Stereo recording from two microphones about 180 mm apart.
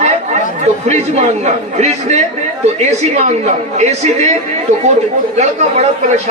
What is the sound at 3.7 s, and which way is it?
Speech, 40° right (ahead or behind).